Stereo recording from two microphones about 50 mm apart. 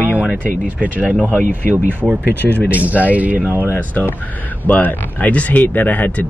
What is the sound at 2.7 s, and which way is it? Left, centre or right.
Speech, right.